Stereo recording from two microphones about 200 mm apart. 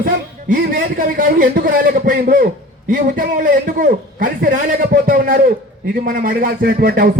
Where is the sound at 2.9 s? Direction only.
45° right (ahead or behind).